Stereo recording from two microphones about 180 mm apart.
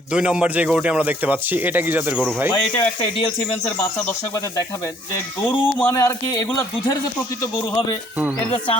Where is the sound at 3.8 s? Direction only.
10° left (ahead or behind).